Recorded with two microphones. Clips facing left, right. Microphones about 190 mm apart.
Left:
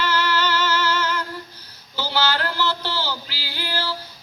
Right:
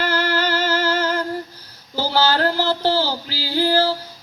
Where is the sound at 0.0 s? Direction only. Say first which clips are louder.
Right 2 dB; 50° right (ahead or behind).